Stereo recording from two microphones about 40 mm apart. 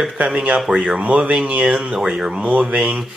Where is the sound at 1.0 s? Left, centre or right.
Right.